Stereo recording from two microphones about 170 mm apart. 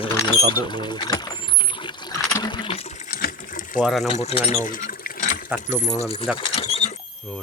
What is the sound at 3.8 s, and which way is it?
Speech, centre (ahead or behind).